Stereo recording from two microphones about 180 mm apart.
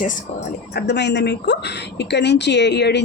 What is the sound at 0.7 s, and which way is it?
A woman's voice, 70° left (ahead or behind).